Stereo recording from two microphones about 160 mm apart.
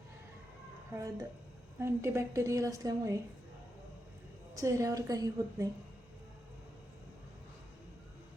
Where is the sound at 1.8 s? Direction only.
15° right (ahead or behind).